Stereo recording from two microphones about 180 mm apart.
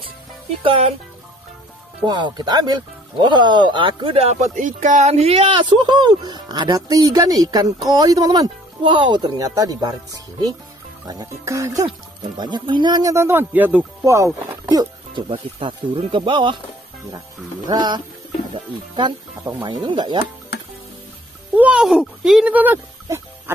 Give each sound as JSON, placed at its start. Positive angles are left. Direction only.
{"t": 0.6, "sound": "speech", "side_deg": -30}
{"t": 2.0, "sound": "speech", "side_deg": -25}
{"t": 11.1, "sound": "speech", "side_deg": -20}
{"t": 17.6, "sound": "speech", "side_deg": -25}
{"t": 21.5, "sound": "speech", "side_deg": -5}